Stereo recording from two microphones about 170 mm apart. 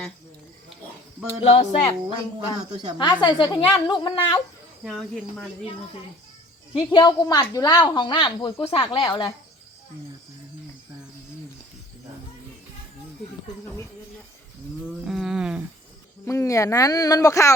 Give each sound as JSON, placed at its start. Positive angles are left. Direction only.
{"t": 1.4, "sound": "speech", "side_deg": 35}
{"t": 4.8, "sound": "speech", "side_deg": 0}
{"t": 6.7, "sound": "speech", "side_deg": 25}
{"t": 15.0, "sound": "a sound", "side_deg": 0}
{"t": 16.2, "sound": "speech", "side_deg": 15}